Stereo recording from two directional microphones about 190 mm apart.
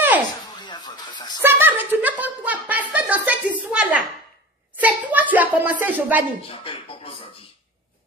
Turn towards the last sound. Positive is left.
turn(degrees=30)  # may be behind; listen again after turning